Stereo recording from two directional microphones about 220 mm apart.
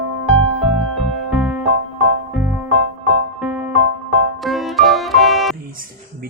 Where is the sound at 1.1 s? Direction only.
Centre (ahead or behind).